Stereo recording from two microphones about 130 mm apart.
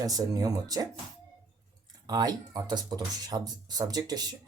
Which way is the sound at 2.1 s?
30° right (ahead or behind).